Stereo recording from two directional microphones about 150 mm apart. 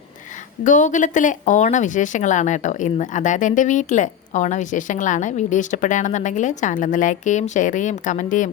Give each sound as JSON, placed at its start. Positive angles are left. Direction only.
{"t": 0.6, "sound": "speech", "side_deg": 55}